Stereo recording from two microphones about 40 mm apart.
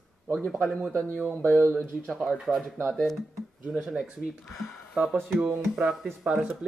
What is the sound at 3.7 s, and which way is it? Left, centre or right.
Speech, centre.